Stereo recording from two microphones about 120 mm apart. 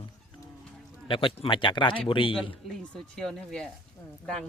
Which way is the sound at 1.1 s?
45° left (ahead or behind).